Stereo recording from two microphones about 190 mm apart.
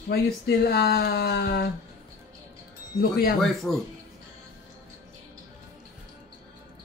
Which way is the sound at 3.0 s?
50° left (ahead or behind).